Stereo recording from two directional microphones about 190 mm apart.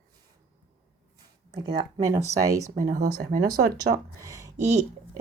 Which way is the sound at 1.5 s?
25° right (ahead or behind).